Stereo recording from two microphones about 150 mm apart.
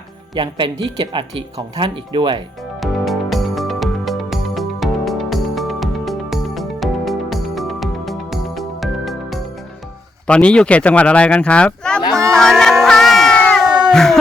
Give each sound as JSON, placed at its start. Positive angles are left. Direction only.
{"t": 0.3, "sound": "speech", "side_deg": -35}
{"t": 2.8, "sound": "music", "side_deg": 0}
{"t": 10.2, "sound": "speech", "side_deg": 5}
{"t": 12.3, "sound": "crowd", "side_deg": 5}
{"t": 13.9, "sound": "speech", "side_deg": 0}